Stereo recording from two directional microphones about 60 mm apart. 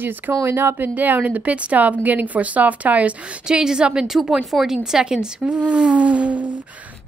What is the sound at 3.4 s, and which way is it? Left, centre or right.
A woman's voice, centre.